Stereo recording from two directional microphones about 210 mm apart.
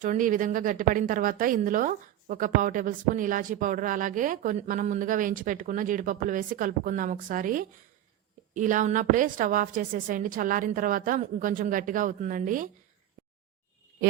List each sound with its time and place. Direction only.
0.0 s a woman's voice: 40° right (ahead or behind)